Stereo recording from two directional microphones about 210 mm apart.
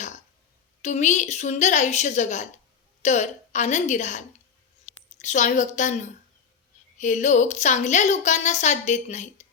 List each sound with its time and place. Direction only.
0.8 s a woman's voice: 35° left (ahead or behind)
4.9 s a sound: 35° left (ahead or behind)
5.2 s a woman's voice: 35° left (ahead or behind)